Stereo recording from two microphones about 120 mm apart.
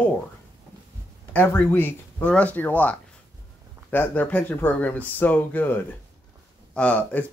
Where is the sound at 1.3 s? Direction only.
15° left (ahead or behind).